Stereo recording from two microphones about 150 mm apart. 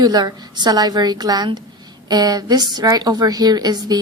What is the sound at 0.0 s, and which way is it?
A woman's voice, 25° right (ahead or behind).